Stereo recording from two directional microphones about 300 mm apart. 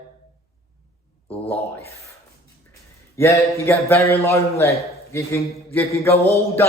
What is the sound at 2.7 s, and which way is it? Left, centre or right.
A man's voice, centre.